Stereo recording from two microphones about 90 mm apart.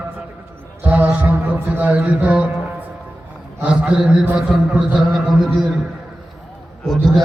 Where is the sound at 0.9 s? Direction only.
20° right (ahead or behind).